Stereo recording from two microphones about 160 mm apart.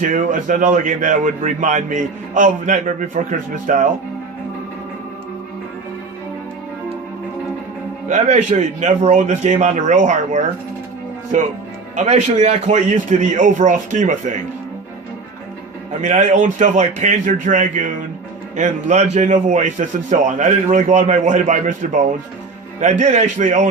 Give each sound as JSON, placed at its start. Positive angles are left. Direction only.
{"t": 0.0, "sound": "a man's voice", "side_deg": -55}
{"t": 8.0, "sound": "a man's voice", "side_deg": -50}
{"t": 11.9, "sound": "a man's voice", "side_deg": -45}
{"t": 16.0, "sound": "a man's voice", "side_deg": -50}